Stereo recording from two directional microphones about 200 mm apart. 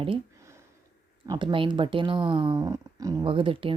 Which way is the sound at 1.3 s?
25° right (ahead or behind).